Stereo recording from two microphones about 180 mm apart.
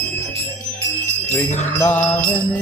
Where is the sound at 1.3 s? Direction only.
10° left (ahead or behind).